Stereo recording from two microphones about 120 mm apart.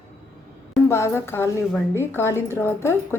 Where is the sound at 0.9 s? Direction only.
20° left (ahead or behind).